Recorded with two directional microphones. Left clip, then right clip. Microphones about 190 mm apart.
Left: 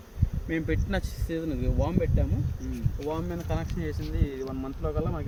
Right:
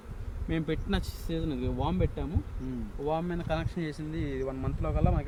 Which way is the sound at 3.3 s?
20° right (ahead or behind).